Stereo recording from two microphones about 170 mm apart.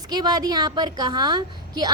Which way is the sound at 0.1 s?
25° right (ahead or behind).